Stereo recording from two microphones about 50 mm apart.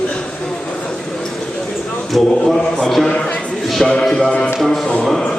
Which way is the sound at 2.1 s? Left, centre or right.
Centre.